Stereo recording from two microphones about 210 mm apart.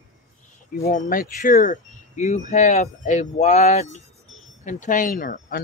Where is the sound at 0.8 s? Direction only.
40° left (ahead or behind).